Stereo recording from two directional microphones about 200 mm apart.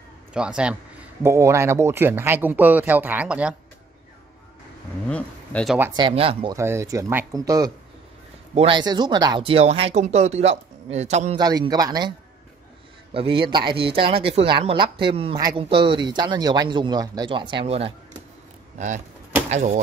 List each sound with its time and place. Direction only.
0.3 s speech: 5° right (ahead or behind)
5.1 s speech: 5° left (ahead or behind)
5.9 s a man's voice: 25° right (ahead or behind)
6.5 s speech: 15° right (ahead or behind); by 11.3 s 35° right (ahead or behind)
11.3 s a man's voice: 20° right (ahead or behind)
13.1 s a man's voice: 25° right (ahead or behind)
19.5 s speech: 40° right (ahead or behind)